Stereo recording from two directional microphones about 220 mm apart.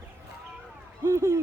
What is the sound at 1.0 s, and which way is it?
Speech, 15° right (ahead or behind).